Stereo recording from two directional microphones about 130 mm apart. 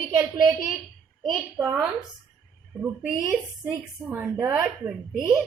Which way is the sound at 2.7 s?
5° right (ahead or behind).